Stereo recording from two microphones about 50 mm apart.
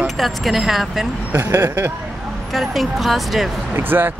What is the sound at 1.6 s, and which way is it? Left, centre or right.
Speech, right.